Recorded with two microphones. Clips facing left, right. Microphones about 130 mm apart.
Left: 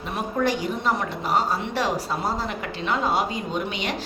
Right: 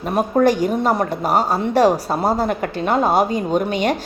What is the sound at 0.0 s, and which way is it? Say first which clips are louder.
A woman's voice: right 9 dB; 45° right (ahead or behind).